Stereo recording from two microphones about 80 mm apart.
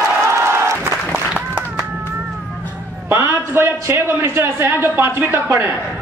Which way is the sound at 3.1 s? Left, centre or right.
Right.